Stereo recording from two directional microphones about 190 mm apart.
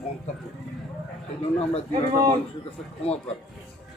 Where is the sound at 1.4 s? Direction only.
35° left (ahead or behind).